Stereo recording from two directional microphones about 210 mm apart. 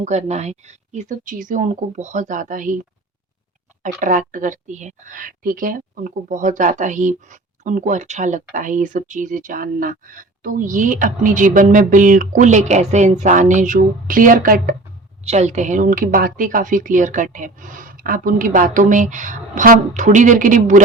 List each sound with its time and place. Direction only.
0.0 s speech: 35° right (ahead or behind)
4.0 s speech: 40° right (ahead or behind)
15.2 s speech: 30° right (ahead or behind)